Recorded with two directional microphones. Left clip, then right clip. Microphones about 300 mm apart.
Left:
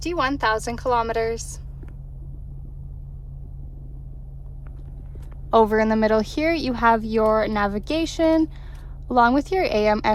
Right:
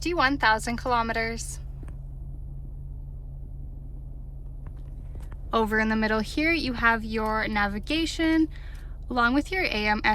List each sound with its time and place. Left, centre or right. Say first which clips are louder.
0.0 s a woman's voice: left 1 dB; centre
5.5 s a woman's voice: left 7 dB; centre